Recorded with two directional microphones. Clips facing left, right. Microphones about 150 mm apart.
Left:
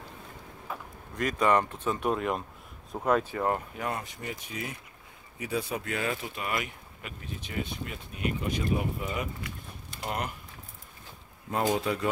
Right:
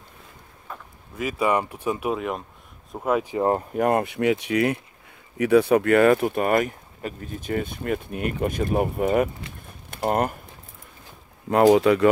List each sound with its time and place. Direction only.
0.7 s vehicle: 5° left (ahead or behind)
1.1 s speech: 5° right (ahead or behind)
3.3 s speech: 30° right (ahead or behind)
3.7 s speech: 55° right (ahead or behind)
11.5 s speech: 80° right